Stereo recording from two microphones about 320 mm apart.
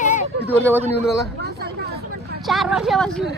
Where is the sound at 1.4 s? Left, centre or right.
Right.